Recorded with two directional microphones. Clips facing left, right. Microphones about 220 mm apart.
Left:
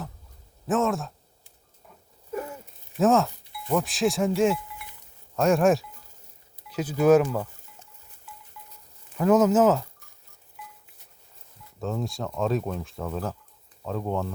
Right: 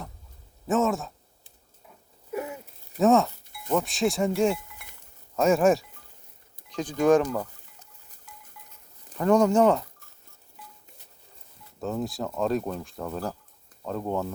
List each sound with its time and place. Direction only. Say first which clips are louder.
0.7 s speech: even; centre (ahead or behind)
2.3 s a sound: right 1 dB; 10° right (ahead or behind)
3.0 s speech: right 1 dB; centre (ahead or behind)
3.4 s a sound: left 5 dB; 45° right (ahead or behind)
3.7 s speech: left 1 dB; centre (ahead or behind)
4.8 s chink: left 6 dB; 45° right (ahead or behind)
5.4 s speech: even; centre (ahead or behind)
7.8 s a sound: left 2 dB; 40° right (ahead or behind)
9.1 s speech: left 1 dB; 5° left (ahead or behind)
11.8 s speech: right 1 dB; centre (ahead or behind)